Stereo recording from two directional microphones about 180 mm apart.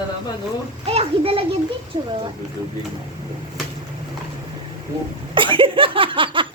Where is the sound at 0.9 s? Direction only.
35° right (ahead or behind).